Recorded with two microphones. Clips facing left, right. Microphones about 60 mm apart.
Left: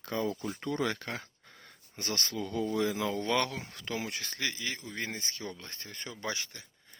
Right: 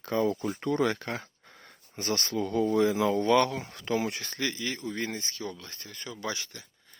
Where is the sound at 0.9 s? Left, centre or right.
Right.